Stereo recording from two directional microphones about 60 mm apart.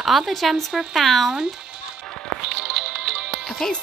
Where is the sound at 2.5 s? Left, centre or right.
Centre.